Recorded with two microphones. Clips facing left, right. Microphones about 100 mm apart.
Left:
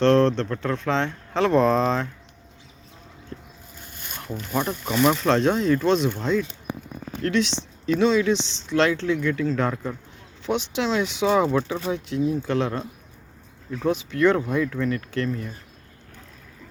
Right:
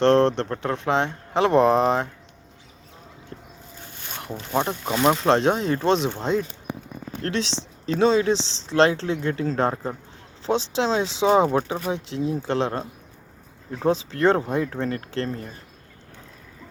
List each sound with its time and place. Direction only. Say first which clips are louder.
0.0 s speech: even; 25° right (ahead or behind)
3.3 s boat: left 2 dB; 35° right (ahead or behind)
4.1 s speech: right 2 dB; 20° right (ahead or behind)
13.7 s speech: right 2 dB; 35° right (ahead or behind)